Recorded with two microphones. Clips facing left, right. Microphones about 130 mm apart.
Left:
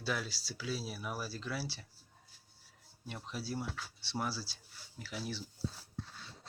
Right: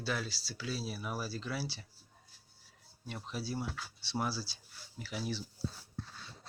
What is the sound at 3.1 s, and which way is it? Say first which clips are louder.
Speech: right 1 dB; centre (ahead or behind).